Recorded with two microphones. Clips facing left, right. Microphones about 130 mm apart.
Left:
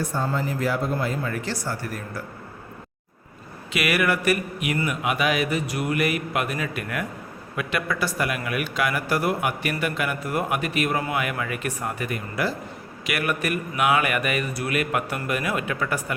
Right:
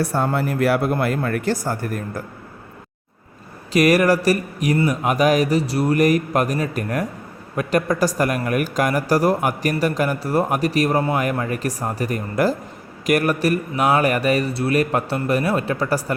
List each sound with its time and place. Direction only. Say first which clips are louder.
0.0 s speech: right 5 dB; 65° right (ahead or behind); by 2.2 s 45° right (ahead or behind)
3.7 s speech: right 8 dB; 40° right (ahead or behind)